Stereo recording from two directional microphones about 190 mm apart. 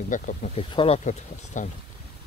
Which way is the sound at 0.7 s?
30° left (ahead or behind).